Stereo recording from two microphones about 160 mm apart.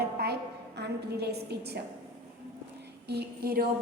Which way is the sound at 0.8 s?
90° right.